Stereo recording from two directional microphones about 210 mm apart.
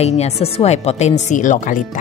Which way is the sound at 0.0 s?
30° left (ahead or behind).